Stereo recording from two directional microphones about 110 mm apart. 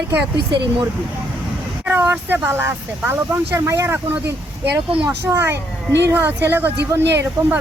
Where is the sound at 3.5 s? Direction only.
25° right (ahead or behind).